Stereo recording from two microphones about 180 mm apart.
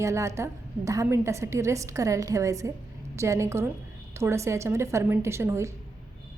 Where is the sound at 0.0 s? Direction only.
15° right (ahead or behind).